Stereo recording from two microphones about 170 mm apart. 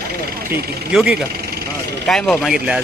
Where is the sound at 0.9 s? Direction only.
5° right (ahead or behind).